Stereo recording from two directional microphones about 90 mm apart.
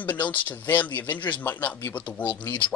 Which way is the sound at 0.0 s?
20° left (ahead or behind).